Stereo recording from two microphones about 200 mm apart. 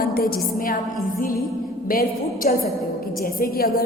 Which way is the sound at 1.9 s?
45° left (ahead or behind).